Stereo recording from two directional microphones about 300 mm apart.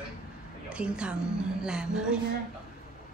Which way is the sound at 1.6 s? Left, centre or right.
Centre.